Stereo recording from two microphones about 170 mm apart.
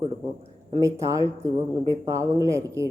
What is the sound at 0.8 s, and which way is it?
Speech, 20° right (ahead or behind).